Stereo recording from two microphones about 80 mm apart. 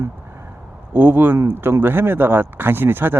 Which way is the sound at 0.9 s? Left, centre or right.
Right.